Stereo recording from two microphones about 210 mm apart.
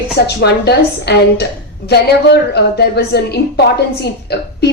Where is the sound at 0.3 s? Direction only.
50° left (ahead or behind).